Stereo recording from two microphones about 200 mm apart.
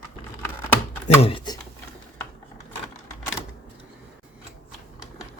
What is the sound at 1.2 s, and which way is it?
Speech, 25° left (ahead or behind).